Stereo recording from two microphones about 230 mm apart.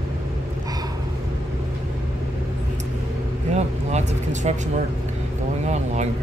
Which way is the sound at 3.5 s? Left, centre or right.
Right.